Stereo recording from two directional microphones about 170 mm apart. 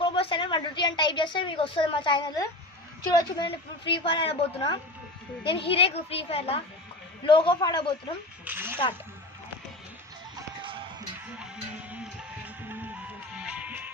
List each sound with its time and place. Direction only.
0.0 s a woman's voice: 30° left (ahead or behind)
8.4 s speech: 10° right (ahead or behind)
10.6 s music: 30° right (ahead or behind)
11.3 s music: 5° right (ahead or behind)